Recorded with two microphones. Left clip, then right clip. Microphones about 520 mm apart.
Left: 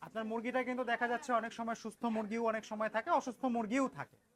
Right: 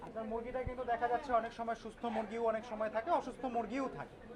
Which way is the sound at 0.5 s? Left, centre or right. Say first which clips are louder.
Left 3 dB; left.